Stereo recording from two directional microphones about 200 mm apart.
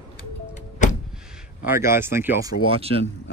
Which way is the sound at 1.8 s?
10° right (ahead or behind).